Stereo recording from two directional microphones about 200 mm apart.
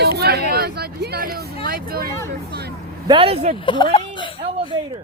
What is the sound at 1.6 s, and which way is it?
Speech, 50° right (ahead or behind).